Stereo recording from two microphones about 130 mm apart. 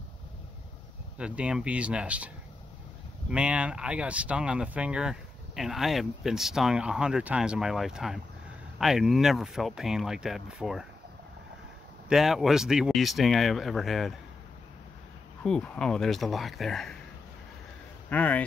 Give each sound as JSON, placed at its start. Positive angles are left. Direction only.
{"t": 1.1, "sound": "speech", "side_deg": -10}
{"t": 12.1, "sound": "speech", "side_deg": 0}
{"t": 15.4, "sound": "speech", "side_deg": 5}
{"t": 18.1, "sound": "speech", "side_deg": 10}